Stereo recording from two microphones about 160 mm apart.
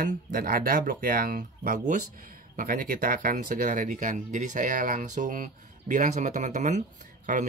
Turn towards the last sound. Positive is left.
turn(degrees=-50)  # may be behind; listen again after turning